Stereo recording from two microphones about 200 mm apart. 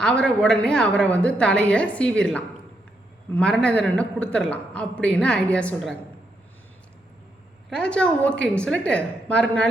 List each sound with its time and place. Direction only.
0.0 s a man's voice: 5° left (ahead or behind)
7.7 s a man's voice: 5° left (ahead or behind)